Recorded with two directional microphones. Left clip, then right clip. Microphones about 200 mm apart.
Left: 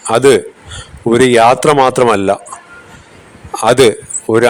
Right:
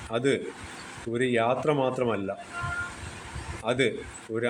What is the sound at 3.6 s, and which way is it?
Speech, 60° left (ahead or behind).